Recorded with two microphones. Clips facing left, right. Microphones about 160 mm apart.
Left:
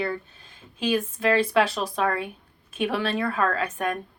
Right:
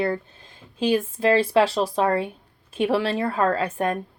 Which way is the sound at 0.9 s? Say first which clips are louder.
Right 3 dB; 30° right (ahead or behind).